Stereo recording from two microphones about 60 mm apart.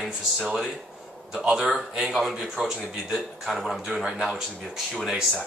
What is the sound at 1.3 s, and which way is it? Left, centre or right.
Speech, centre.